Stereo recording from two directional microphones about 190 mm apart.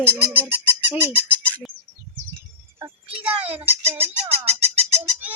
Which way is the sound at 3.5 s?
30° right (ahead or behind).